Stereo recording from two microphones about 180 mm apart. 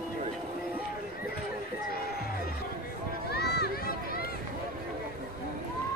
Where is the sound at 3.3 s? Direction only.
65° left (ahead or behind).